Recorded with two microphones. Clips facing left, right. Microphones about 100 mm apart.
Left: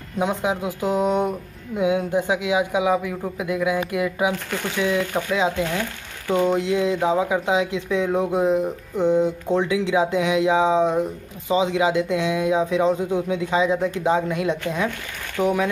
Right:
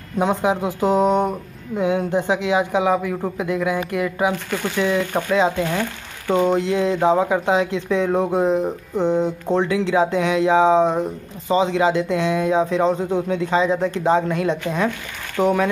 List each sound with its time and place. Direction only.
0.2 s speech: centre (ahead or behind)
5.8 s speech: 30° right (ahead or behind)
6.4 s speech: 5° left (ahead or behind)
8.6 s music: 30° right (ahead or behind)
9.6 s speech: 5° left (ahead or behind)